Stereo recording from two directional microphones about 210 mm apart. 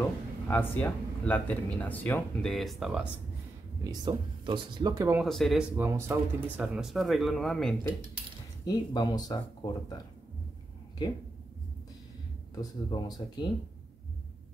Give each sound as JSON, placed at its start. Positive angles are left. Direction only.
{"t": 0.0, "sound": "speech", "side_deg": 10}
{"t": 3.8, "sound": "speech", "side_deg": -20}
{"t": 5.2, "sound": "speech", "side_deg": 0}
{"t": 8.6, "sound": "speech", "side_deg": 20}
{"t": 12.5, "sound": "speech", "side_deg": 20}